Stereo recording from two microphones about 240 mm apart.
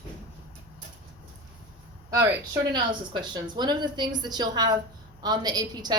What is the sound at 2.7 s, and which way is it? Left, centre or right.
Speech, centre.